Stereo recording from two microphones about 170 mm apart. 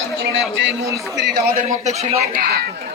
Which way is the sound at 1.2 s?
70° right (ahead or behind).